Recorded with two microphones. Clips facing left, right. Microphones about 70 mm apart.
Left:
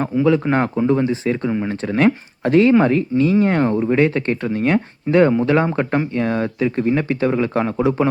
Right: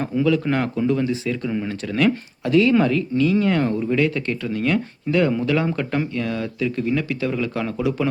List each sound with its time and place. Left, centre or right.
0.2 s speech: left